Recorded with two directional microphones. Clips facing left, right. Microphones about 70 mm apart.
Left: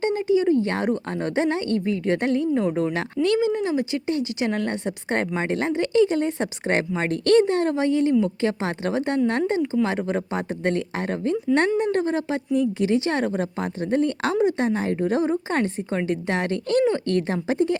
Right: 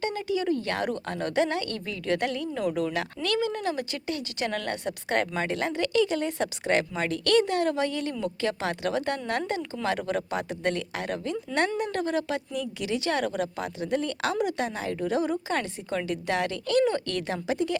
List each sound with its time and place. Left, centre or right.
0.0 s a woman's voice: left